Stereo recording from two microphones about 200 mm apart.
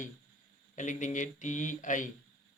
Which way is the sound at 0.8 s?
40° left (ahead or behind).